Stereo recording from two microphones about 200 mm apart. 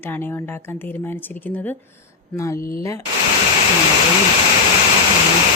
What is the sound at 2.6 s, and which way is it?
Speech, 45° left (ahead or behind).